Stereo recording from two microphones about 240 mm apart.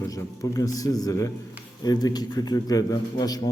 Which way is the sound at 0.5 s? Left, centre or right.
Centre.